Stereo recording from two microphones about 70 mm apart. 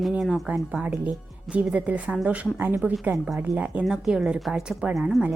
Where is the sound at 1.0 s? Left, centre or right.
Centre.